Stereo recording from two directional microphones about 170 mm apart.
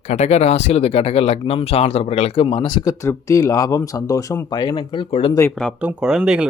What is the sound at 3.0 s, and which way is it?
Speech, 15° left (ahead or behind).